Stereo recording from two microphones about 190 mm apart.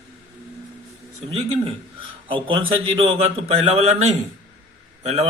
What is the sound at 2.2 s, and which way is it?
A man's voice, 25° right (ahead or behind).